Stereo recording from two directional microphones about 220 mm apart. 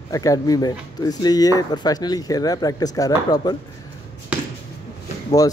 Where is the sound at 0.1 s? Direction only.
15° left (ahead or behind).